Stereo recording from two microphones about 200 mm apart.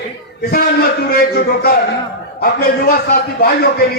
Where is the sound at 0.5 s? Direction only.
50° left (ahead or behind).